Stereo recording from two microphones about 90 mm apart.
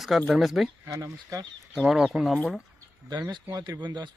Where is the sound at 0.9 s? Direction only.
35° right (ahead or behind).